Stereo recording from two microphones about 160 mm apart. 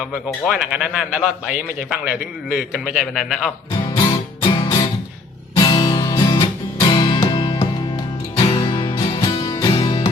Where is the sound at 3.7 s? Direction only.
25° left (ahead or behind).